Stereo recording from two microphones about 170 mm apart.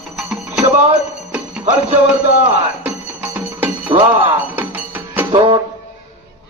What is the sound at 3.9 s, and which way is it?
Music, 10° right (ahead or behind).